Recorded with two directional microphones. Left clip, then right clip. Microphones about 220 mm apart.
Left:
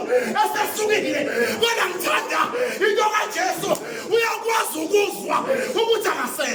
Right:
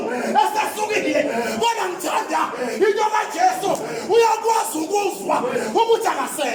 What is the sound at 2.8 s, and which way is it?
Battle cry, 20° right (ahead or behind).